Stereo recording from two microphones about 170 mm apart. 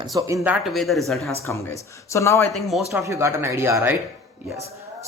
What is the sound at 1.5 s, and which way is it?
A man's voice, 15° left (ahead or behind).